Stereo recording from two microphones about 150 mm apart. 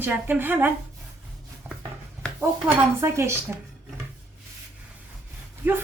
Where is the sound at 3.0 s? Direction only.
15° right (ahead or behind).